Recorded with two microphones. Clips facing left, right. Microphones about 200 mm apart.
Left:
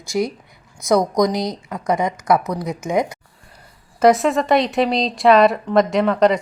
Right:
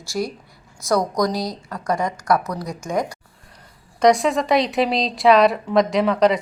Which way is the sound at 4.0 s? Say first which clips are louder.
Left 2 dB; centre (ahead or behind).